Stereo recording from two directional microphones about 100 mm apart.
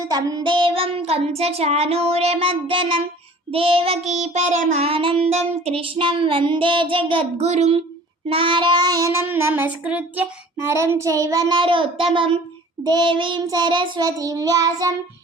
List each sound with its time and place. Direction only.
0.1 s child singing: 40° right (ahead or behind)
0.4 s child singing: 55° right (ahead or behind); by 7.8 s 90° right
8.3 s child singing: 60° right (ahead or behind); by 10.2 s 15° right (ahead or behind)
10.7 s a child's voice: 30° right (ahead or behind); by 12.0 s 60° right (ahead or behind)
12.1 s child singing: 60° right (ahead or behind)
12.8 s child singing: 45° right (ahead or behind)
14.2 s a child's voice: 35° right (ahead or behind)